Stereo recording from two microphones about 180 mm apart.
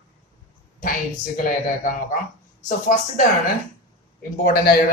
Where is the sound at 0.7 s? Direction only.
50° left (ahead or behind).